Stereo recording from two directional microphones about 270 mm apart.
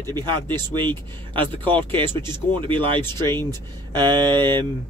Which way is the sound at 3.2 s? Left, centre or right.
Centre.